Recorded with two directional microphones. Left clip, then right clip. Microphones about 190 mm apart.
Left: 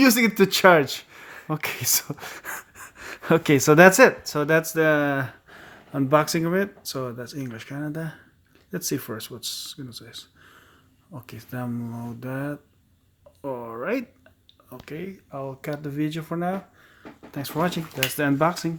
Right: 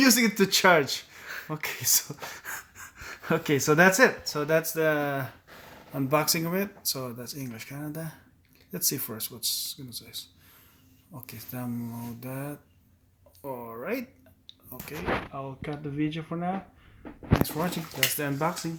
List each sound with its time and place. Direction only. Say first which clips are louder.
0.0 s speech: left 4 dB; 45° left (ahead or behind)